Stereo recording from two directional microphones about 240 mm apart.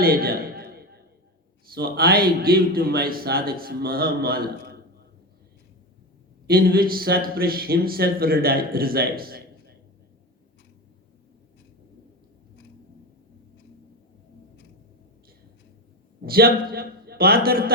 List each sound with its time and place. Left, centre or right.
0.0 s a sound: right
1.7 s speech: right
6.5 s speech: right
16.2 s speech: right